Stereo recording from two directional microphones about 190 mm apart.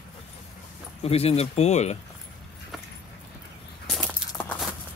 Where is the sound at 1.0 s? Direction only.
30° left (ahead or behind).